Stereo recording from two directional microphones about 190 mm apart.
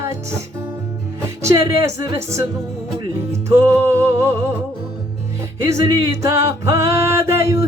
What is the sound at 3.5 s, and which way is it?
Music, 15° right (ahead or behind).